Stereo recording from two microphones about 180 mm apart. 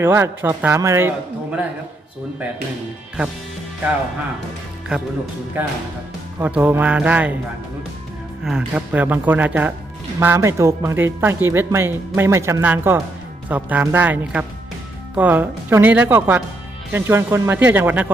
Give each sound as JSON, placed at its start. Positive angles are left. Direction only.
{"t": 0.0, "sound": "speech", "side_deg": -10}
{"t": 5.6, "sound": "speech", "side_deg": -10}
{"t": 8.4, "sound": "speech", "side_deg": -5}